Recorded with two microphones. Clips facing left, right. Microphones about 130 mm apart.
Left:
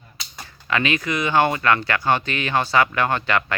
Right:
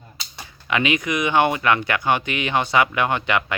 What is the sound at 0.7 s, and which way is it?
Speech, 15° right (ahead or behind).